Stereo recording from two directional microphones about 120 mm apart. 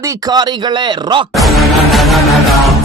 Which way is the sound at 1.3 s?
Centre (ahead or behind).